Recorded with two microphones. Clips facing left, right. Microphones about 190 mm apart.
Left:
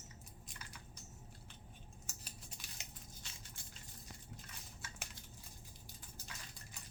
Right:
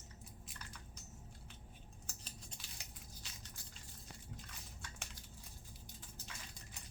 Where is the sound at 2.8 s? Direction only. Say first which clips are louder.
Left 1 dB; 20° left (ahead or behind).